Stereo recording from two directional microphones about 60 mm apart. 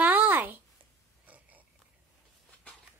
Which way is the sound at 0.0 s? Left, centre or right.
Right.